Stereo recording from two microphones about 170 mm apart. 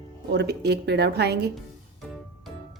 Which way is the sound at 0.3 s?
75° right (ahead or behind).